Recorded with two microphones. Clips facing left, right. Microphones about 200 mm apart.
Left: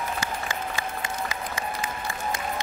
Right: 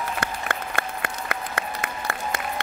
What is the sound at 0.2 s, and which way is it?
Applause, 60° right (ahead or behind).